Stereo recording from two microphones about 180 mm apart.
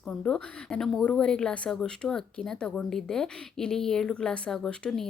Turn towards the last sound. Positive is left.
turn(degrees=5)  # may be behind; listen again after turning